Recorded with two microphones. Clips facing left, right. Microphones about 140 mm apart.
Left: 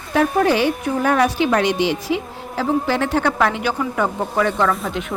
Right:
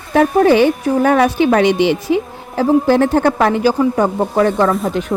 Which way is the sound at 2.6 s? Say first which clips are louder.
Right 7 dB; 50° right (ahead or behind).